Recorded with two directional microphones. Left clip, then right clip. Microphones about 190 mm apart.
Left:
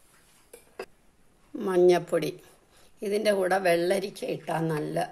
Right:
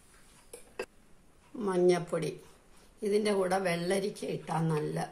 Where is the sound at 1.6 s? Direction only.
40° left (ahead or behind).